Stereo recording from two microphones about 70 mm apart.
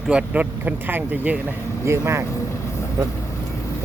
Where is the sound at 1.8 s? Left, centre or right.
Right.